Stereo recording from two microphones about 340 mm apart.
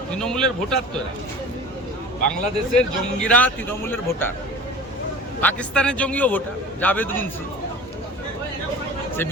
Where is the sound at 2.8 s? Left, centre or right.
Centre.